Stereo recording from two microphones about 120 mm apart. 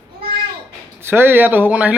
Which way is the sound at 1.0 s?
20° right (ahead or behind).